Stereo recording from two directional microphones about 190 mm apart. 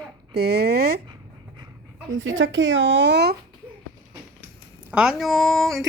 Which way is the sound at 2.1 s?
90° right.